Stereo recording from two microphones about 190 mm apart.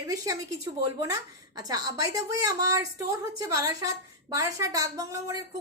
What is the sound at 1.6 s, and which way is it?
A woman's voice, 20° right (ahead or behind).